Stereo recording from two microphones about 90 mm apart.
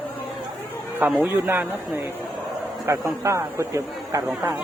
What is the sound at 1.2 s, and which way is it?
Speech, 25° right (ahead or behind).